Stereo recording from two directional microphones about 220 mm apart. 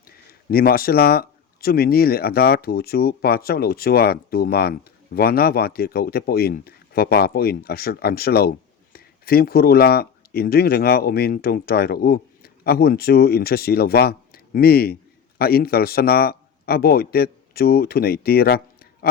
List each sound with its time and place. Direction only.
0.3 s a man's voice: 40° left (ahead or behind)